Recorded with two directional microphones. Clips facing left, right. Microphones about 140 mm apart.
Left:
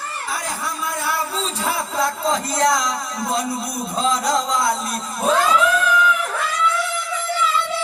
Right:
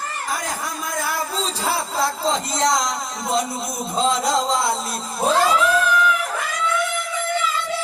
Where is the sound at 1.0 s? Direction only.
40° right (ahead or behind); by 2.8 s 25° right (ahead or behind).